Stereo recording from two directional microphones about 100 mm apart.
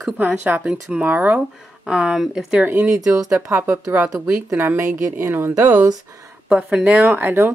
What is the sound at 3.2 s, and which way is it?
Speech, 30° right (ahead or behind).